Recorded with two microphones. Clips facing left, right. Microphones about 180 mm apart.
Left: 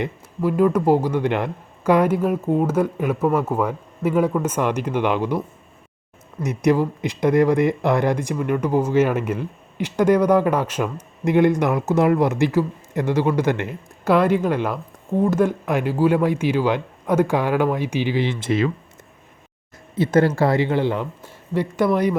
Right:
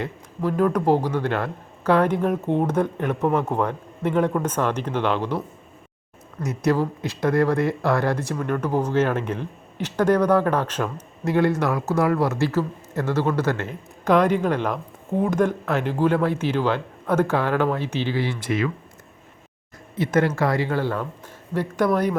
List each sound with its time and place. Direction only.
0.0 s speech: 10° left (ahead or behind)
6.4 s speech: 15° left (ahead or behind)
20.0 s speech: 30° left (ahead or behind); by 22.2 s 10° left (ahead or behind)